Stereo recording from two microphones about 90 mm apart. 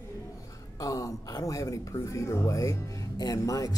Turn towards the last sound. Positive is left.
turn(degrees=40)  # may be behind; listen again after turning